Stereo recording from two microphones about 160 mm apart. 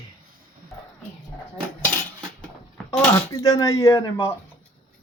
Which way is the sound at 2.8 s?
20° left (ahead or behind).